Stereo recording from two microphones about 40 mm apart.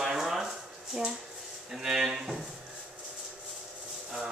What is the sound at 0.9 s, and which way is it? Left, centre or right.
Speech, right.